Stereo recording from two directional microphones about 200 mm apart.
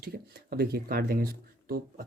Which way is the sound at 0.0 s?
50° right (ahead or behind).